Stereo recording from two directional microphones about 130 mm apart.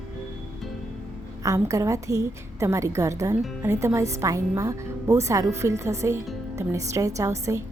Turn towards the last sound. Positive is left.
turn(degrees=-25)  # may be behind; listen again after turning